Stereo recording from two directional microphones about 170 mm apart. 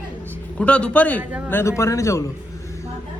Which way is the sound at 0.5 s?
5° left (ahead or behind).